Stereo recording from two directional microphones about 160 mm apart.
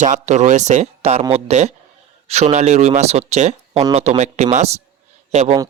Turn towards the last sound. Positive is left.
turn(degrees=-45)  # may be behind; listen again after turning